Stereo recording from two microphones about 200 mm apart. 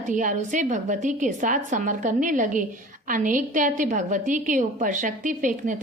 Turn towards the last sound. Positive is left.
turn(degrees=-40)  # may be behind; listen again after turning